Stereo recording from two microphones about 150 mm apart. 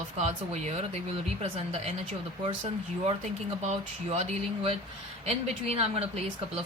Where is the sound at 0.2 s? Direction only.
50° right (ahead or behind).